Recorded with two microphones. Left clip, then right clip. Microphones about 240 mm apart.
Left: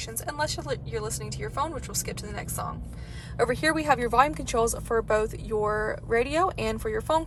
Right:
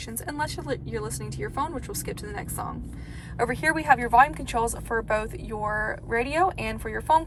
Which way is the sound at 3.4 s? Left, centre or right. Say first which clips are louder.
Even; centre.